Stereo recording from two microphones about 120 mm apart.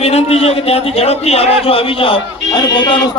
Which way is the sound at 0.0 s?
60° left (ahead or behind).